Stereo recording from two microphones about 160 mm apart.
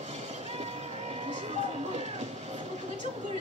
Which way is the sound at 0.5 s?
45° right (ahead or behind).